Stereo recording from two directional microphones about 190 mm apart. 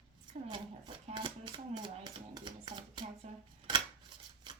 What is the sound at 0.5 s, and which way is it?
Speech, 25° right (ahead or behind).